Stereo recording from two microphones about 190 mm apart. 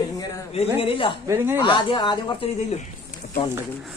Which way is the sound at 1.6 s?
25° left (ahead or behind).